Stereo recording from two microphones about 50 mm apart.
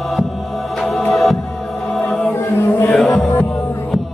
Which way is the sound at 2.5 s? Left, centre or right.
Left.